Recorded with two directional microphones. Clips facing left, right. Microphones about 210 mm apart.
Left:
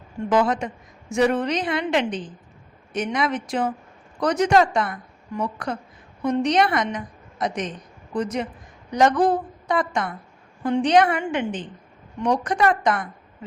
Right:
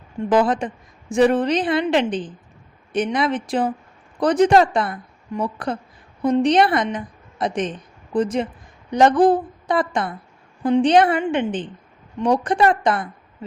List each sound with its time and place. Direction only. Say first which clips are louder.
0.3 s a woman's voice: right 3 dB; 30° right (ahead or behind)